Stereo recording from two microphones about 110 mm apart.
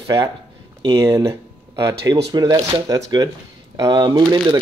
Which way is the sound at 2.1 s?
40° right (ahead or behind).